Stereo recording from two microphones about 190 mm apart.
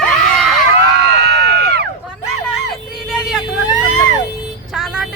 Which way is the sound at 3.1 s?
Centre (ahead or behind).